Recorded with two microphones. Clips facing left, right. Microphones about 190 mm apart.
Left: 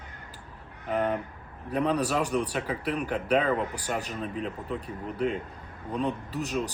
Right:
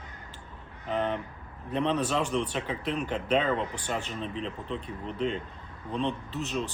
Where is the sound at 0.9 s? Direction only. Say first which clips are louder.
Left 2 dB; 5° left (ahead or behind).